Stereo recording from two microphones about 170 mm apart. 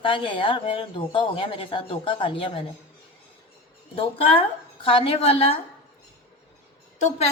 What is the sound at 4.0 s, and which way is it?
A woman's voice, 35° left (ahead or behind).